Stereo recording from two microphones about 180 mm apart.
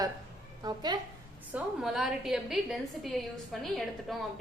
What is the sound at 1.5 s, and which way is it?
A woman's voice, centre (ahead or behind).